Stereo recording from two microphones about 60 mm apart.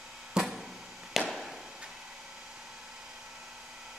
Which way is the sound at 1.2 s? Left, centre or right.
Centre.